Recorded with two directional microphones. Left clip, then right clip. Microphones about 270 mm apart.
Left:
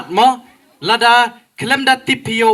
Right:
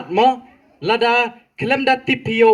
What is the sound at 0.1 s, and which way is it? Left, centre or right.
A man's voice, left.